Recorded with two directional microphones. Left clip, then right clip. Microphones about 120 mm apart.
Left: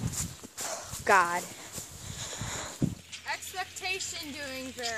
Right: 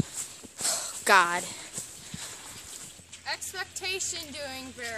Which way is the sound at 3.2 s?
45° right (ahead or behind).